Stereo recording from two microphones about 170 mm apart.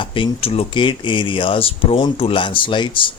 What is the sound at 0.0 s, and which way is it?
Speech, 30° left (ahead or behind).